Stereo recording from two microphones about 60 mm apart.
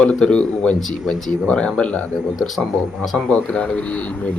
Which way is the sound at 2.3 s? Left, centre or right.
Centre.